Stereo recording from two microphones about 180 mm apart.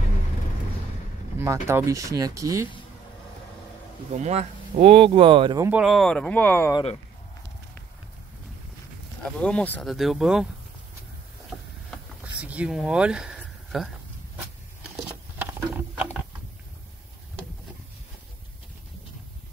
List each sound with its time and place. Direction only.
1.4 s speech: 15° right (ahead or behind)
4.1 s speech: 40° right (ahead or behind)
5.6 s speech: 10° right (ahead or behind); by 6.7 s 10° left (ahead or behind)
6.7 s speech: 30° left (ahead or behind)
9.2 s speech: 5° left (ahead or behind)
11.9 s a sound: 5° right (ahead or behind)